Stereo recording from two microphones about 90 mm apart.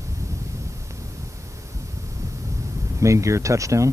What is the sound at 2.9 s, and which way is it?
Speech, 35° right (ahead or behind).